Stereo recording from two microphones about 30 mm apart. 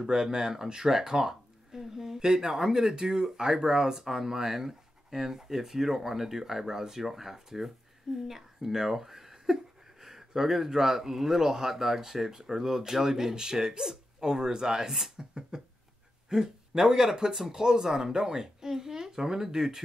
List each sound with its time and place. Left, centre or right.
0.0 s speech: right
2.1 s speech: right
15.5 s a sound: right
16.3 s speech: centre